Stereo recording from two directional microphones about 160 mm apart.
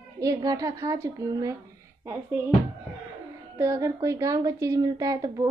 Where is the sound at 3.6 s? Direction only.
20° right (ahead or behind).